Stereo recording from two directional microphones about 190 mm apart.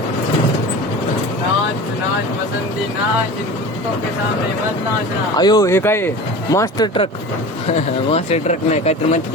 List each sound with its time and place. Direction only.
5.4 s speech: 20° left (ahead or behind)
7.7 s speech: 35° left (ahead or behind)